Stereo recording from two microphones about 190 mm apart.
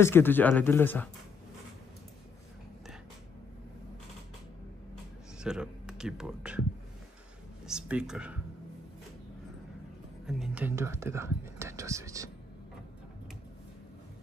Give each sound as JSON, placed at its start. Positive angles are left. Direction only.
{"t": 0.0, "sound": "speech", "side_deg": 10}
{"t": 5.4, "sound": "speech", "side_deg": -5}
{"t": 7.6, "sound": "speech", "side_deg": -5}
{"t": 10.2, "sound": "speech", "side_deg": -5}